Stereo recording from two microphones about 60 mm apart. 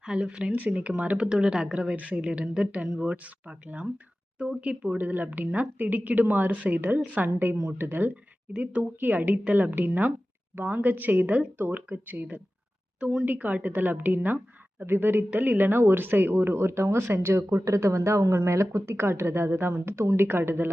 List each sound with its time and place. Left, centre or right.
0.0 s speech: centre
4.4 s speech: centre
4.9 s a woman's voice: right
8.5 s a woman's voice: right
13.0 s speech: centre
13.2 s speech: right